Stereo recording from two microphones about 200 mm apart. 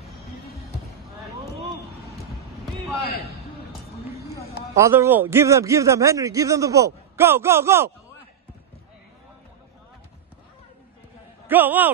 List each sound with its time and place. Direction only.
3.0 s a man's voice: 50° left (ahead or behind)
4.7 s a man's voice: 15° right (ahead or behind)
11.4 s a man's voice: 10° right (ahead or behind)